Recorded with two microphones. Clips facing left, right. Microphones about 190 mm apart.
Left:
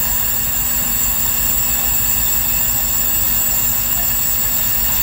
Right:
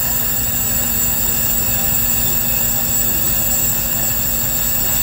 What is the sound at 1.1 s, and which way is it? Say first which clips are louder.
Vehicle: right 4 dB; 45° right (ahead or behind).